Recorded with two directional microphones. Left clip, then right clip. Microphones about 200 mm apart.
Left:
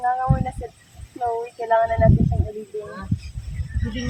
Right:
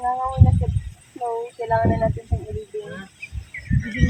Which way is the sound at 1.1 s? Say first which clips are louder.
Left 1 dB; centre (ahead or behind).